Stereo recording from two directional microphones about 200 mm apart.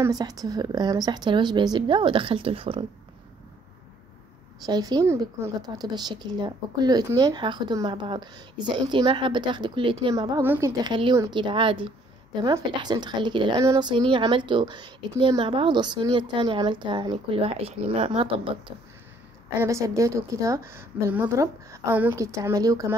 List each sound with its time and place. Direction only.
0.0 s a woman's voice: 20° right (ahead or behind)
4.6 s a woman's voice: 20° right (ahead or behind)
10.8 s a woman's voice: 25° right (ahead or behind)
19.6 s a woman's voice: 15° right (ahead or behind)